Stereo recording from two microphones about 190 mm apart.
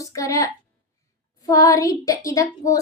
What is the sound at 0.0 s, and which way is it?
A woman's voice, 15° left (ahead or behind).